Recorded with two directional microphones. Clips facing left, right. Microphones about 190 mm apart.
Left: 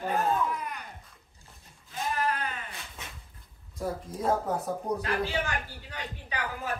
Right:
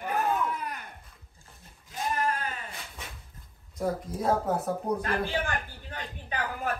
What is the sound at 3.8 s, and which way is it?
Speech, centre (ahead or behind).